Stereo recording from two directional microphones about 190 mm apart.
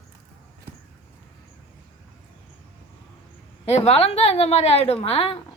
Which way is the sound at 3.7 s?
35° left (ahead or behind).